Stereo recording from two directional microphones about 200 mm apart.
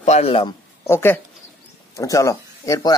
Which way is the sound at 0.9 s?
10° left (ahead or behind).